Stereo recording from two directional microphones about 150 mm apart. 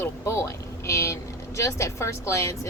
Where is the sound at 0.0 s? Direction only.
20° left (ahead or behind).